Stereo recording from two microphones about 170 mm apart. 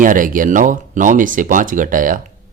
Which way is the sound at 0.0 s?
50° right (ahead or behind).